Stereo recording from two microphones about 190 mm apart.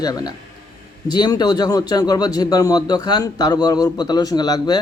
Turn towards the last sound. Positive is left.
turn(degrees=20)  # may be behind; listen again after turning